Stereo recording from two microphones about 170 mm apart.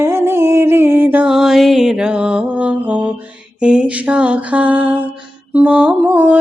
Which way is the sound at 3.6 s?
5° right (ahead or behind).